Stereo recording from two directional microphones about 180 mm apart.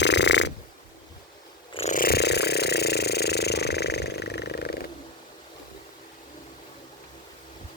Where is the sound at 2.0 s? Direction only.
60° left (ahead or behind).